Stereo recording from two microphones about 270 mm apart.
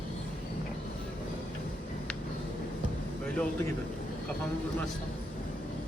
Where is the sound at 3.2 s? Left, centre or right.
Centre.